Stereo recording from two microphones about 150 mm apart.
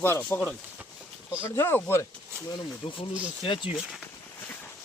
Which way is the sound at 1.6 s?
15° left (ahead or behind).